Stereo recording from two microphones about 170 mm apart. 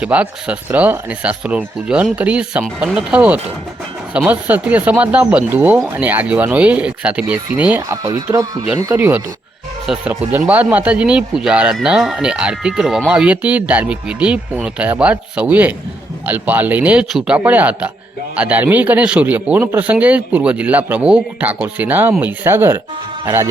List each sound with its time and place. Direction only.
0.0 s a man's voice: 10° right (ahead or behind)
7.8 s a man's voice: 20° right (ahead or behind)